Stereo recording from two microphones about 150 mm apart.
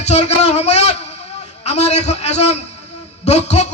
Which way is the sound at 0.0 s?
45° left (ahead or behind).